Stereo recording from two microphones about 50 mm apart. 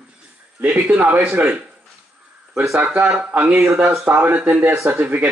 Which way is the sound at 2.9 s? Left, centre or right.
Right.